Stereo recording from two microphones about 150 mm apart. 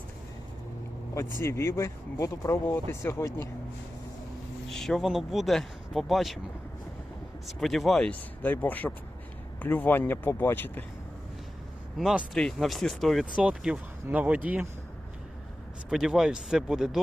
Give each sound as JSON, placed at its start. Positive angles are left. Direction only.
{"t": 1.1, "sound": "speech", "side_deg": 15}
{"t": 4.7, "sound": "speech", "side_deg": 0}
{"t": 7.4, "sound": "speech", "side_deg": 0}
{"t": 11.9, "sound": "speech", "side_deg": 0}
{"t": 15.9, "sound": "speech", "side_deg": -5}